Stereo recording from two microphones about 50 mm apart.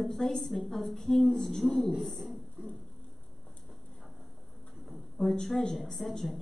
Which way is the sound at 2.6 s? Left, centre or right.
Right.